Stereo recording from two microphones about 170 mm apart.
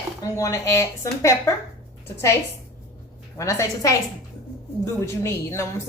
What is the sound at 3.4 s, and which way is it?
A woman's voice, 20° left (ahead or behind).